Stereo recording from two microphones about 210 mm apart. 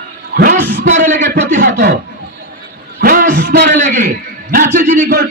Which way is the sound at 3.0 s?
40° right (ahead or behind).